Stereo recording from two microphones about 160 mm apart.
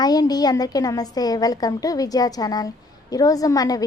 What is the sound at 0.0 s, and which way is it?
A woman's voice, 25° left (ahead or behind).